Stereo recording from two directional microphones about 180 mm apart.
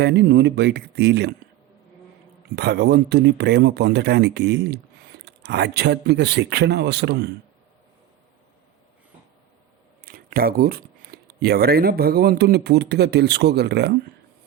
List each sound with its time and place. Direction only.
0.0 s speech: 65° right (ahead or behind)
2.6 s speech: 65° right (ahead or behind)
10.0 s a sound: 55° right (ahead or behind)
11.3 s speech: 60° right (ahead or behind)